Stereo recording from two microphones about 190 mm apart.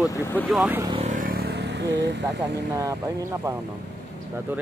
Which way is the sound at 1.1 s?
50° right (ahead or behind).